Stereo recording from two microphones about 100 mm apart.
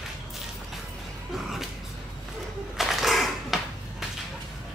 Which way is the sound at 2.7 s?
Centre (ahead or behind).